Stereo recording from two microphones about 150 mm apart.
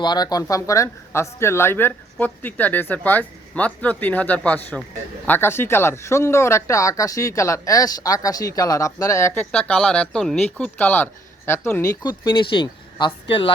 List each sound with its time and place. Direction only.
0.0 s speech: 30° left (ahead or behind)